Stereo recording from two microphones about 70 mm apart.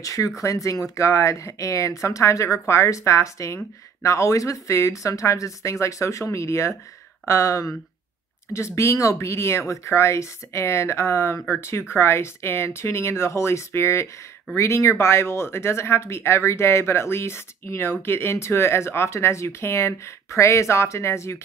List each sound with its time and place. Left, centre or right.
0.0 s speech: left